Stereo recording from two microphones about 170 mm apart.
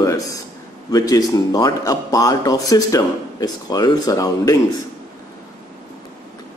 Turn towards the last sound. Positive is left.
turn(degrees=20)  # may be behind; listen again after turning